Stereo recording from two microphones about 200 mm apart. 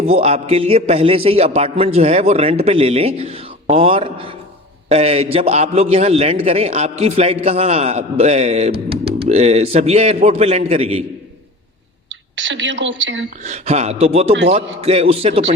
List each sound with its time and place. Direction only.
0.0 s a man's voice: 30° right (ahead or behind)
12.4 s a woman's voice: 65° right (ahead or behind)
13.4 s a man's voice: 35° right (ahead or behind)